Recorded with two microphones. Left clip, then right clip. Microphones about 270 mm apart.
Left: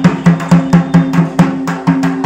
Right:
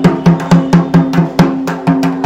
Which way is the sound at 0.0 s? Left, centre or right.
Centre.